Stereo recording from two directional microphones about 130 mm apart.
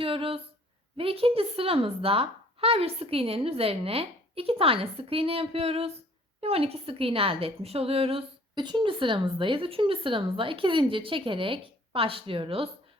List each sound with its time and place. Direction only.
0.0 s a woman's voice: 45° right (ahead or behind)